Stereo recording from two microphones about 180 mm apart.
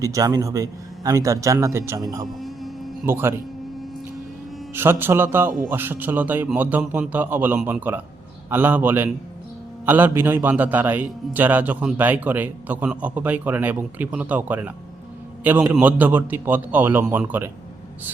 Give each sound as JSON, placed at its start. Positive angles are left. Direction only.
{"t": 0.0, "sound": "a man's voice", "side_deg": -20}
{"t": 2.4, "sound": "a sound", "side_deg": 0}
{"t": 3.1, "sound": "a man's voice", "side_deg": -15}
{"t": 4.7, "sound": "a man's voice", "side_deg": -10}
{"t": 5.5, "sound": "speech", "side_deg": -50}
{"t": 5.7, "sound": "a man's voice", "side_deg": -10}